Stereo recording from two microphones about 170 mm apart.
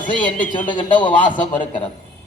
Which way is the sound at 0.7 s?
25° left (ahead or behind).